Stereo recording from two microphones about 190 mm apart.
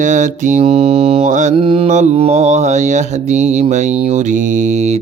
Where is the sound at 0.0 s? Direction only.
40° right (ahead or behind).